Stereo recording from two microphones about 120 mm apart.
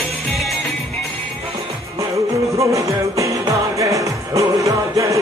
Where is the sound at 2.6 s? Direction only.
25° right (ahead or behind).